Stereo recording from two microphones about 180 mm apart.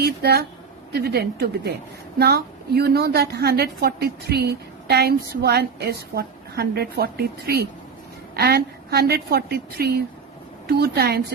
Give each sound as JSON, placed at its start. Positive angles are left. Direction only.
{"t": 0.0, "sound": "a woman's voice", "side_deg": -65}